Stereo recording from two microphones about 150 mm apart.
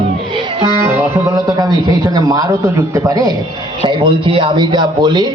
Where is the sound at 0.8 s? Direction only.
15° right (ahead or behind).